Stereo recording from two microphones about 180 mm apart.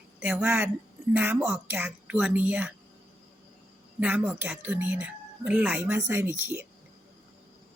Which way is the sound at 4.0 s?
10° right (ahead or behind).